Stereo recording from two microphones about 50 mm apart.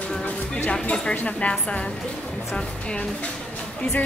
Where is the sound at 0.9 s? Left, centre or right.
Left.